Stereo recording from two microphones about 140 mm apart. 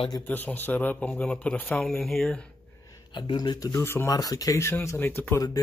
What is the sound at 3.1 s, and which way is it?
Speech, 35° left (ahead or behind).